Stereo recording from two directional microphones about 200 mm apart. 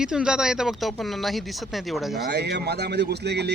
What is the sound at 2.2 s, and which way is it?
Speech, 55° right (ahead or behind).